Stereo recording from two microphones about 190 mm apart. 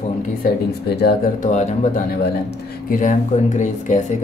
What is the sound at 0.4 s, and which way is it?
Speech, 60° left (ahead or behind).